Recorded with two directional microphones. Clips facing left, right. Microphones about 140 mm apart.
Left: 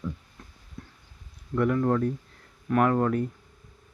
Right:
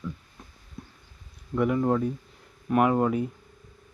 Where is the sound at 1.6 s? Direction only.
10° right (ahead or behind).